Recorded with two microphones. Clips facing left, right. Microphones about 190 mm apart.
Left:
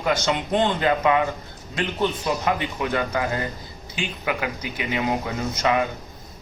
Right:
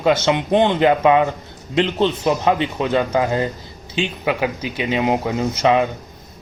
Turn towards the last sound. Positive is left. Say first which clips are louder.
# right 6 dB
turn(degrees=-20)  # may be behind; listen again after turning